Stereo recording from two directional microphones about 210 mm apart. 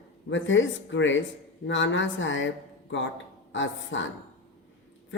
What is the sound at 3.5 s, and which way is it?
Speech, 65° left (ahead or behind).